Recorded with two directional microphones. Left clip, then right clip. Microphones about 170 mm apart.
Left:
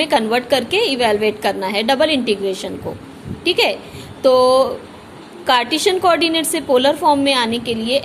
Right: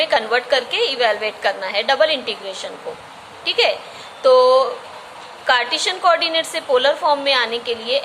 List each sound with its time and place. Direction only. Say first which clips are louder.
0.0 s a woman's voice: left 1 dB; 40° left (ahead or behind)